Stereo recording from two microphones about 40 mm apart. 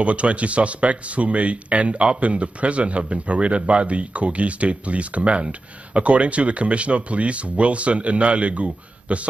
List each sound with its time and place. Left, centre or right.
0.0 s speech: right